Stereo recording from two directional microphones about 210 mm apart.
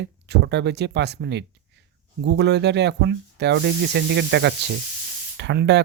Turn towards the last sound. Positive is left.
turn(degrees=-55)  # may be behind; listen again after turning